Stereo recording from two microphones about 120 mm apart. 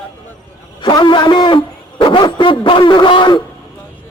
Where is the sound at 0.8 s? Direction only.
40° left (ahead or behind).